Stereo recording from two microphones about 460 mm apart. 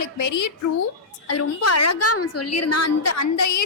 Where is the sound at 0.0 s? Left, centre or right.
Left.